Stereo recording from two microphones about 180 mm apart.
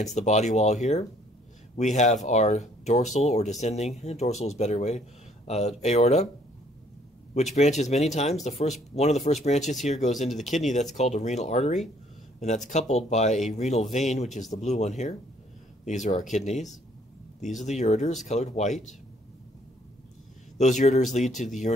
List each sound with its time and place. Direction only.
0.0 s speech: 40° left (ahead or behind)
7.5 s speech: 40° left (ahead or behind)
17.6 s speech: 40° left (ahead or behind)
20.5 s speech: 40° left (ahead or behind)